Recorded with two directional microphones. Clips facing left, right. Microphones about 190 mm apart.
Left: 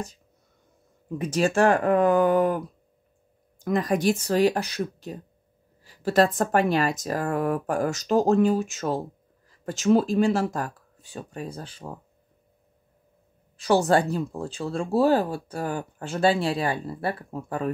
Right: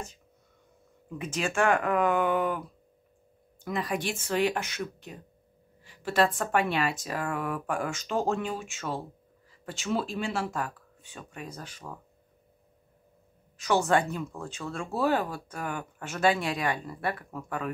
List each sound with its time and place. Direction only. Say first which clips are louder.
1.1 s speech: left 7 dB; 40° left (ahead or behind)
3.6 s speech: left 8 dB; 45° left (ahead or behind)
13.6 s speech: left 4 dB; 30° left (ahead or behind)